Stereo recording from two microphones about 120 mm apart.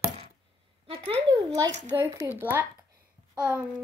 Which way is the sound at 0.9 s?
50° right (ahead or behind).